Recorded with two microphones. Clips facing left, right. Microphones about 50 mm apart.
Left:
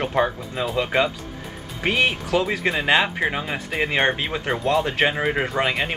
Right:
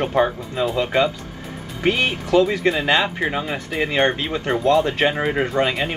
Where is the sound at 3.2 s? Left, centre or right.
Centre.